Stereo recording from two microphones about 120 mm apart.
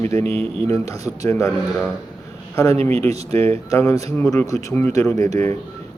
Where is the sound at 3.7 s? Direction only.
25° left (ahead or behind).